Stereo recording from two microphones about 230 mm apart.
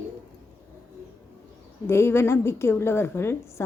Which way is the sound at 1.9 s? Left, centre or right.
Centre.